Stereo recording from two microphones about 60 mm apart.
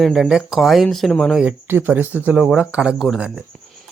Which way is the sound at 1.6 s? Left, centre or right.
Right.